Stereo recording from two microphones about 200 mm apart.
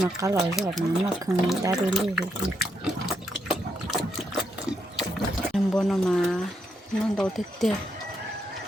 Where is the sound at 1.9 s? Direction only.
Centre (ahead or behind).